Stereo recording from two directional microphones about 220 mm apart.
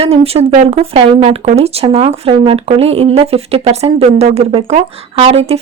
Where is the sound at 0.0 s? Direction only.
25° right (ahead or behind).